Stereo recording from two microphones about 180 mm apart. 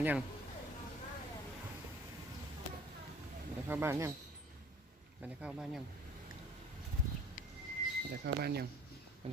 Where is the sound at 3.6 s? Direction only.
10° right (ahead or behind).